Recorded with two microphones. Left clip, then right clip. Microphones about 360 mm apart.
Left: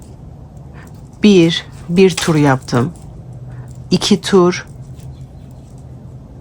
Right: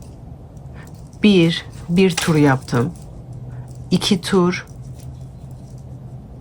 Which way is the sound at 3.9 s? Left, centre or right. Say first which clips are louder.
Left 5 dB; centre.